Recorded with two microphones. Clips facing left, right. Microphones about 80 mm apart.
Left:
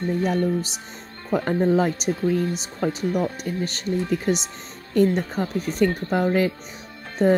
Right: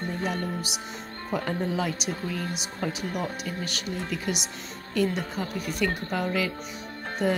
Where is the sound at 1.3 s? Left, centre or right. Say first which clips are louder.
Left 8 dB; left.